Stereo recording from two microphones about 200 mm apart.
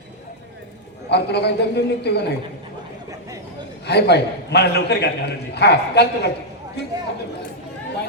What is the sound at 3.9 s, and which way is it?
A man's voice, 55° left (ahead or behind).